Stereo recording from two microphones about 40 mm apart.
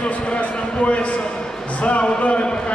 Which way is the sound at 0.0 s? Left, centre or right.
Left.